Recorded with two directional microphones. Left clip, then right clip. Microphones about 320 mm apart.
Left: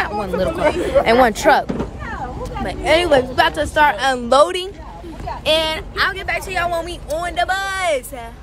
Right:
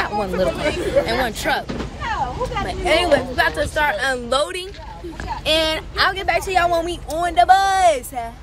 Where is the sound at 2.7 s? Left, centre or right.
Centre.